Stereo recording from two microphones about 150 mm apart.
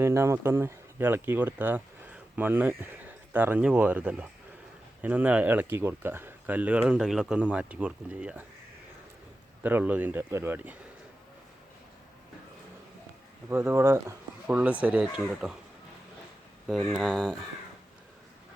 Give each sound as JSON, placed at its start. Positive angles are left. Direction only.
{"t": 0.0, "sound": "speech", "side_deg": -20}
{"t": 9.6, "sound": "speech", "side_deg": -10}
{"t": 13.5, "sound": "speech", "side_deg": -15}
{"t": 16.6, "sound": "speech", "side_deg": 0}